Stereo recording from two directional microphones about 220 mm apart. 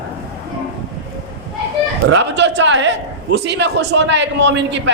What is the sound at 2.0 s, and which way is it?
A woman's voice, 55° right (ahead or behind).